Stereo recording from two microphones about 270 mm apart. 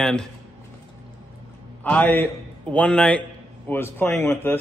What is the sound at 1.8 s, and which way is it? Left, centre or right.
A man's voice, centre.